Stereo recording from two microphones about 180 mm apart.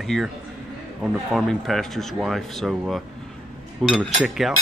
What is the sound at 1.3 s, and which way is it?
Speech, centre (ahead or behind).